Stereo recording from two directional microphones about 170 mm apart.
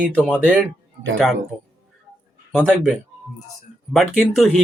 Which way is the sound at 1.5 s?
Centre (ahead or behind).